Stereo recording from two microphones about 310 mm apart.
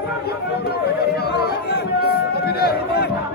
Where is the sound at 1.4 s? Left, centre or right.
Left.